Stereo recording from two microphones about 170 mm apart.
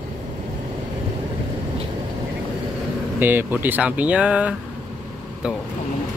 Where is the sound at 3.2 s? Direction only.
10° right (ahead or behind).